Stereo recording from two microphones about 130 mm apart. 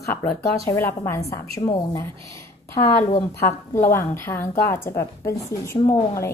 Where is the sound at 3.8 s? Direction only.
20° left (ahead or behind).